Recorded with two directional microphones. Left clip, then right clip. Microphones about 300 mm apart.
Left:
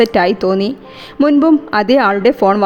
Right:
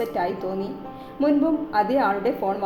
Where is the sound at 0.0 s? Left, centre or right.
Left.